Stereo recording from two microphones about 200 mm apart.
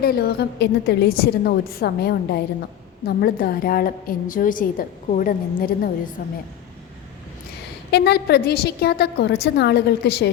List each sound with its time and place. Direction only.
0.0 s a woman's voice: 50° left (ahead or behind)
7.9 s a woman's voice: 55° left (ahead or behind)